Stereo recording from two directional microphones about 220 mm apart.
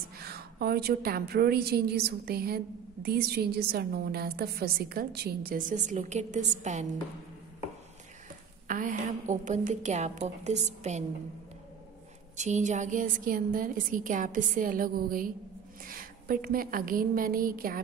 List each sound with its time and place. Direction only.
0.2 s a woman's voice: 45° right (ahead or behind)
8.6 s a woman's voice: 35° right (ahead or behind)
12.4 s a woman's voice: 35° right (ahead or behind)